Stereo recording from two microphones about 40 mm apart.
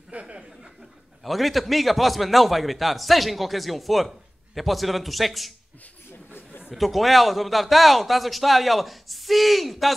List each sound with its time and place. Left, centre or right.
0.1 s chuckle: right
1.2 s a man's voice: centre
6.7 s a man's voice: centre